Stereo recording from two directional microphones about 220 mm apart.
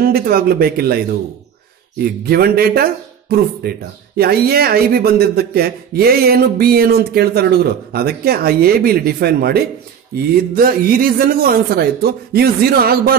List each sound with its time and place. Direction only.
0.0 s speech: 40° right (ahead or behind)
2.2 s speech: 45° right (ahead or behind)